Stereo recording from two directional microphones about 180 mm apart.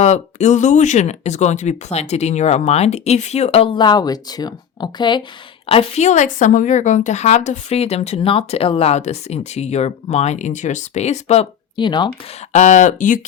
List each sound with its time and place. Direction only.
0.0 s a woman's voice: 40° left (ahead or behind)
5.6 s a woman's voice: 35° left (ahead or behind)
11.8 s speech: 25° left (ahead or behind)
12.5 s speech: 40° left (ahead or behind)